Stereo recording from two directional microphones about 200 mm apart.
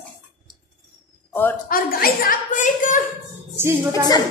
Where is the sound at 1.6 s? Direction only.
45° left (ahead or behind).